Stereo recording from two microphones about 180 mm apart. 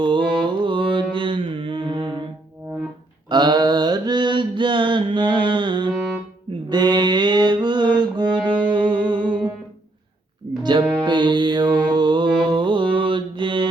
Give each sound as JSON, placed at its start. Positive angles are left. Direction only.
{"t": 0.0, "sound": "mantra", "side_deg": -25}
{"t": 3.2, "sound": "mantra", "side_deg": -25}
{"t": 6.7, "sound": "music", "side_deg": -25}
{"t": 10.6, "sound": "music", "side_deg": -25}